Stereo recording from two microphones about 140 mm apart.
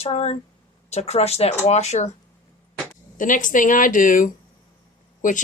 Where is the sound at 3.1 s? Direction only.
70° left (ahead or behind).